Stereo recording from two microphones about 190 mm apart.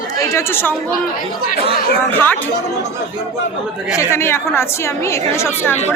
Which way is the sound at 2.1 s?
10° left (ahead or behind).